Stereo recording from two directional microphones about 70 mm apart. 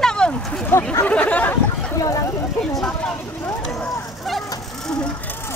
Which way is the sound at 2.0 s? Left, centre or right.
Left.